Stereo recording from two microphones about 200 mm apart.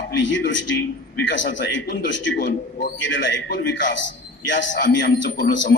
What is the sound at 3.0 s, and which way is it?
A man's voice, 65° left (ahead or behind).